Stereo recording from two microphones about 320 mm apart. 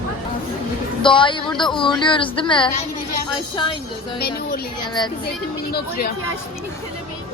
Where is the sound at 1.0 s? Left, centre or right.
Centre.